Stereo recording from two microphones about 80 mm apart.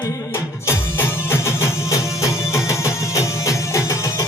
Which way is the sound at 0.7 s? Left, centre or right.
Left.